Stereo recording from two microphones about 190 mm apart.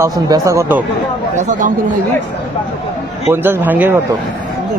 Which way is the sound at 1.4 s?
40° right (ahead or behind).